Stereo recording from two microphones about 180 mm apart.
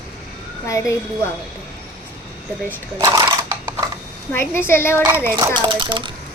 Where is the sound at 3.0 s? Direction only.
20° right (ahead or behind).